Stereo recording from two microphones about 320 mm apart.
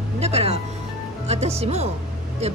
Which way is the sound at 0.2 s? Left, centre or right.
Centre.